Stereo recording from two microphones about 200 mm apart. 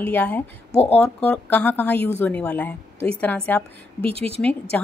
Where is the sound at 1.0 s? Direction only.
5° left (ahead or behind).